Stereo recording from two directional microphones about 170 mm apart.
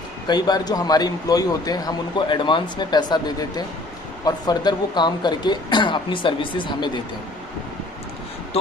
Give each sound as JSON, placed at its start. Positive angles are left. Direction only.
{"t": 0.3, "sound": "speech", "side_deg": 25}